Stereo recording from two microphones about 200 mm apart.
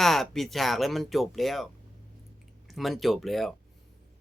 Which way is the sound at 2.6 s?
Centre (ahead or behind).